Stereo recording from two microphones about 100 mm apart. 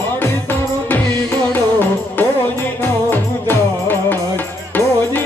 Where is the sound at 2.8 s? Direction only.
20° left (ahead or behind).